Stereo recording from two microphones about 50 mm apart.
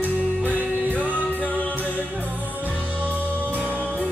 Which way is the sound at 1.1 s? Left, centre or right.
Left.